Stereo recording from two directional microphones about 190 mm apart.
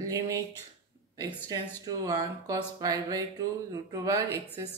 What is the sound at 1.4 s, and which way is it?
Speech, 20° right (ahead or behind).